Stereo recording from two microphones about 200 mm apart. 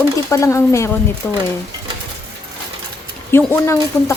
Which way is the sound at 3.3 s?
10° left (ahead or behind).